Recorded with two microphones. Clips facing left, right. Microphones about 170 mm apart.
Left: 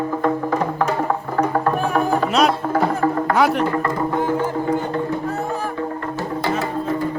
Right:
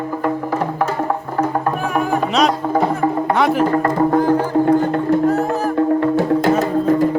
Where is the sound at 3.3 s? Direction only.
Centre (ahead or behind).